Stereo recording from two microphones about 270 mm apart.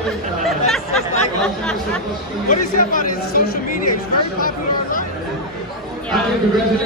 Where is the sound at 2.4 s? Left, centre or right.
Left.